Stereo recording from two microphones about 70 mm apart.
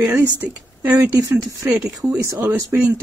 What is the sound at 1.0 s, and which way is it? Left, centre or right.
Speech, right.